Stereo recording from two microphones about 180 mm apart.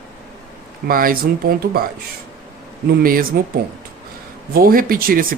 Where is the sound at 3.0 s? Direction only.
50° right (ahead or behind).